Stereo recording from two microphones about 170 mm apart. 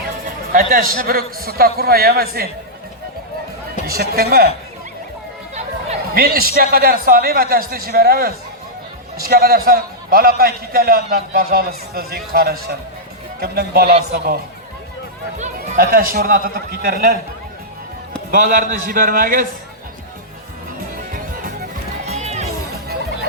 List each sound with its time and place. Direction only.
0.3 s a man's voice: 55° right (ahead or behind)
3.8 s a man's voice: 65° right (ahead or behind)
6.1 s a man's voice: 60° right (ahead or behind)
15.5 s a man's voice: 60° right (ahead or behind)
18.3 s a man's voice: 55° right (ahead or behind)
22.2 s music: 40° right (ahead or behind)